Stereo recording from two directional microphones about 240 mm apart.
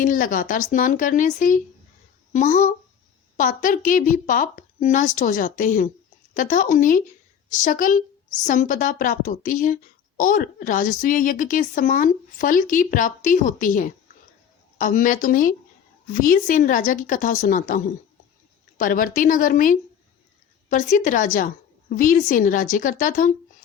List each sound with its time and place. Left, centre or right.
0.0 s a woman's voice: left